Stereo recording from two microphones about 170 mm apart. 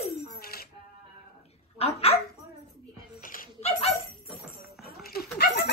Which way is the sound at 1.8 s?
35° left (ahead or behind).